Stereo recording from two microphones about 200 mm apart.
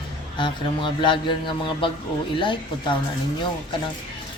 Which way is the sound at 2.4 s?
25° left (ahead or behind).